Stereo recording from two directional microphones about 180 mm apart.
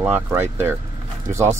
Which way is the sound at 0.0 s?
10° right (ahead or behind).